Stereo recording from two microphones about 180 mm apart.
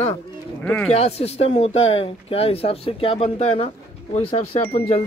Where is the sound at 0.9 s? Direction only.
35° left (ahead or behind).